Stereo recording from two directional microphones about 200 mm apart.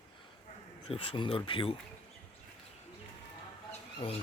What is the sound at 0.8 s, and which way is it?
Speech, 25° left (ahead or behind).